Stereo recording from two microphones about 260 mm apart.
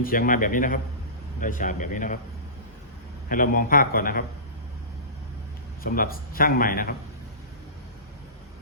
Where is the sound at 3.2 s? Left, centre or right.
Left.